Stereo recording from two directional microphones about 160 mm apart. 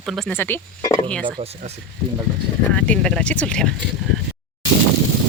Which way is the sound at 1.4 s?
40° right (ahead or behind).